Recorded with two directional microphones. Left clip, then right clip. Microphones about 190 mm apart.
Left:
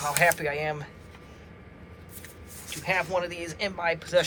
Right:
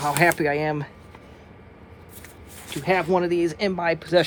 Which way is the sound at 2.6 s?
55° right (ahead or behind).